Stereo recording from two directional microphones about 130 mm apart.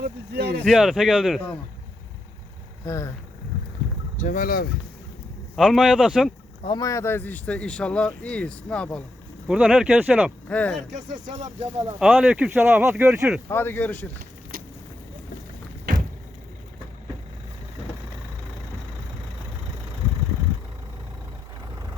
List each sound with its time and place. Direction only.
0.6 s speech: centre (ahead or behind)
2.8 s speech: 25° left (ahead or behind)
4.2 s speech: 90° left
5.5 s speech: centre (ahead or behind)
6.7 s speech: 25° left (ahead or behind); by 9.0 s 10° left (ahead or behind)
9.5 s speech: 5° right (ahead or behind)
10.5 s speech: 10° left (ahead or behind)
10.9 s speech: 65° right (ahead or behind)
11.9 s speech: 5° right (ahead or behind)
13.5 s speech: 15° left (ahead or behind)